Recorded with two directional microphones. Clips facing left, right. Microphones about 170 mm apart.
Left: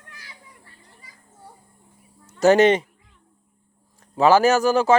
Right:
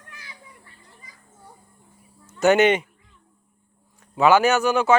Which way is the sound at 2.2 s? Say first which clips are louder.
Left 2 dB; 35° left (ahead or behind).